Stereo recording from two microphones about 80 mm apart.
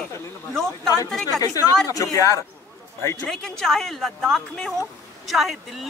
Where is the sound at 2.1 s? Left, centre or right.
Left.